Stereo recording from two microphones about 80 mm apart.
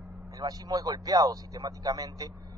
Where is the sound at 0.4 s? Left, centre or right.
Right.